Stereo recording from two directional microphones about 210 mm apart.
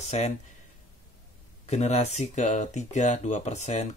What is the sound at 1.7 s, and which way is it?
Speech, 30° left (ahead or behind).